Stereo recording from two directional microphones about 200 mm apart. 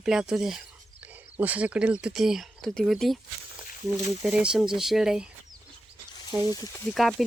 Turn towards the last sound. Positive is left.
turn(degrees=0)  # may be behind; listen again after turning